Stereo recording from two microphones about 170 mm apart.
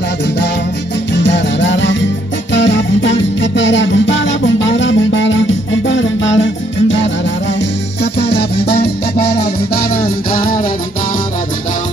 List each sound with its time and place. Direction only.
1.1 s music: 90° left
8.0 s music: 80° left; by 10.7 s 60° left (ahead or behind)